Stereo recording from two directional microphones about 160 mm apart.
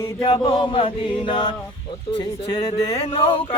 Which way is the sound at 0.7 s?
35° left (ahead or behind).